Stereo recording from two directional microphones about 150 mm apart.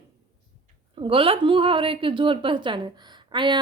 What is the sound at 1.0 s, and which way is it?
A woman's voice, 35° right (ahead or behind).